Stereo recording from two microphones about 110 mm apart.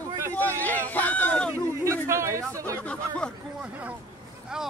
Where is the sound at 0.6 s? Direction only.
15° left (ahead or behind).